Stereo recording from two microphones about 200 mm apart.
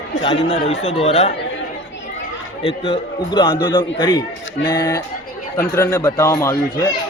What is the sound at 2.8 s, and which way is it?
Speech, 20° left (ahead or behind).